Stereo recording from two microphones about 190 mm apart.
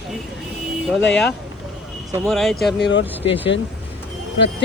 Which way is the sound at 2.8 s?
70° left (ahead or behind).